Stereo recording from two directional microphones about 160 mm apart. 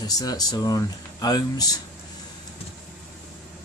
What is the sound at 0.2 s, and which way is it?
Speech, 25° left (ahead or behind).